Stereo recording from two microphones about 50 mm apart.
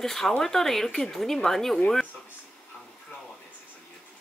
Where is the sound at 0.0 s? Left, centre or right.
Centre.